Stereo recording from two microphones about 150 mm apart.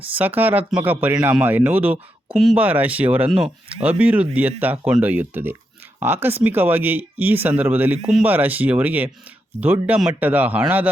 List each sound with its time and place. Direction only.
0.2 s speech: 10° right (ahead or behind)
2.3 s speech: centre (ahead or behind)
2.6 s speech: 10° right (ahead or behind)
3.2 s speech: 40° right (ahead or behind)
3.8 s speech: 10° right (ahead or behind)